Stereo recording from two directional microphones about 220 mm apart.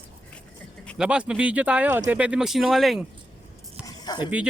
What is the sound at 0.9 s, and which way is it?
Speech, 5° right (ahead or behind).